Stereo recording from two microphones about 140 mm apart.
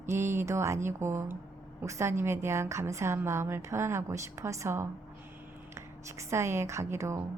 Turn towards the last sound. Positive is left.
turn(degrees=-20)  # may be behind; listen again after turning